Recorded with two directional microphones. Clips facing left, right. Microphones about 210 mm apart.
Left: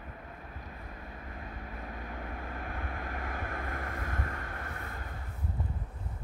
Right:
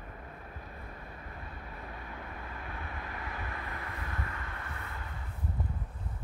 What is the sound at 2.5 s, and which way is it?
Vehicle, 50° left (ahead or behind).